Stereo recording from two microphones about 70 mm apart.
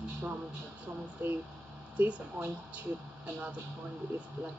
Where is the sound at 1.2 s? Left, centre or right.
Right.